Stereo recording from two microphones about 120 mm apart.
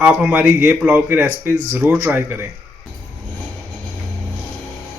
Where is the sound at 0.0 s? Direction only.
10° right (ahead or behind).